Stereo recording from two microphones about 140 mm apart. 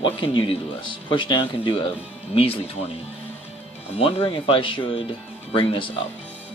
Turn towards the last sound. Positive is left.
turn(degrees=40)  # may be behind; listen again after turning